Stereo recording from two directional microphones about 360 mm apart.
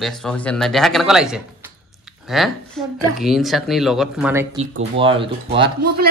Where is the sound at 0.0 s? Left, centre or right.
Centre.